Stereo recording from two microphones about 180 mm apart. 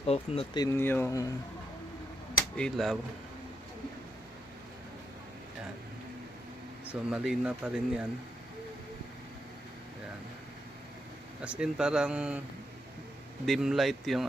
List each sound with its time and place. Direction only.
0.0 s speech: 35° left (ahead or behind)
0.6 s speech: 15° left (ahead or behind)
2.6 s speech: 5° left (ahead or behind)
7.1 s speech: 5° right (ahead or behind)
11.4 s speech: 5° right (ahead or behind)
13.4 s speech: centre (ahead or behind)